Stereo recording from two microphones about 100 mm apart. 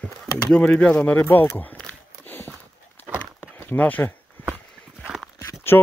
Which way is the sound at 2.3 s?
20° left (ahead or behind).